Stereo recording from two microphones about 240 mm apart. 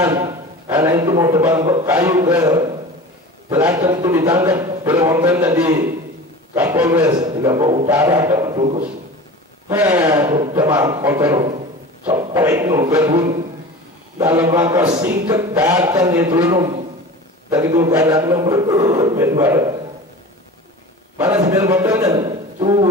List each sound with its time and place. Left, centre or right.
0.0 s a man's voice: centre
9.7 s a man's voice: centre
11.3 s speech: right
12.4 s a man's voice: centre
21.2 s a man's voice: centre